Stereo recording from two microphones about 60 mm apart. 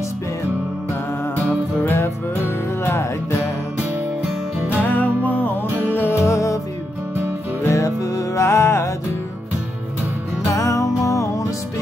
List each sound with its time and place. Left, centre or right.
1.9 s music: left
4.8 s music: left
5.9 s music: left
7.6 s music: left
10.5 s music: left